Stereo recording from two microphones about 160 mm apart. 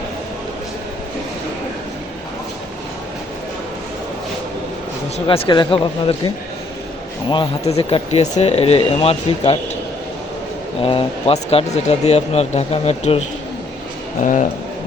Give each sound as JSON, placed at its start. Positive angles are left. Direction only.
{"t": 5.1, "sound": "speech", "side_deg": 35}
{"t": 7.7, "sound": "speech", "side_deg": 40}
{"t": 10.8, "sound": "speech", "side_deg": 35}
{"t": 14.2, "sound": "speech", "side_deg": 50}